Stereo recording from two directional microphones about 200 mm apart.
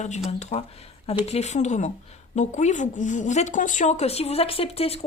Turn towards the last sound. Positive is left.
turn(degrees=30)  # may be behind; listen again after turning